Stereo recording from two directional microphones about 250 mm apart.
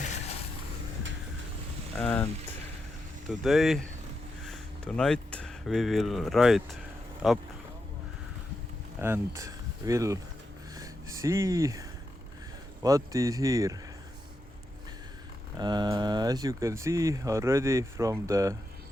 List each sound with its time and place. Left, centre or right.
0.0 s vehicle: left
2.0 s speech: centre
9.0 s speech: centre
10.8 s a sound: centre
12.8 s speech: centre
15.5 s speech: centre